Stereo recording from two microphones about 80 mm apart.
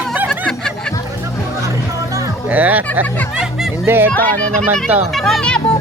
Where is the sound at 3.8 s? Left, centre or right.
Right.